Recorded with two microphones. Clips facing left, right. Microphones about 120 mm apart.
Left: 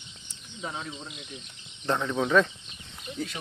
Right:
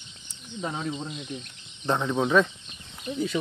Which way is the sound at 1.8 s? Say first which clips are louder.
Right 2 dB; 15° right (ahead or behind).